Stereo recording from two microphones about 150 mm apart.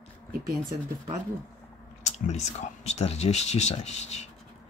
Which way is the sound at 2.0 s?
50° left (ahead or behind).